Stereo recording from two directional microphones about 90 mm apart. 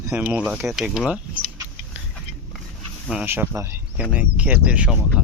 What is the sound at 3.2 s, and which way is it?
Speech, 20° right (ahead or behind).